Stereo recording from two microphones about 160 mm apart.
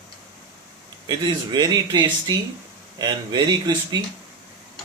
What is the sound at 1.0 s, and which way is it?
Speech, 25° right (ahead or behind).